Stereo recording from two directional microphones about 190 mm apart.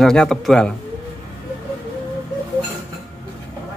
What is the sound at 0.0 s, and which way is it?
Speech, 5° left (ahead or behind).